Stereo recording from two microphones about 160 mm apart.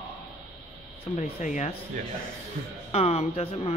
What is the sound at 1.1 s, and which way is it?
Speech, 45° left (ahead or behind).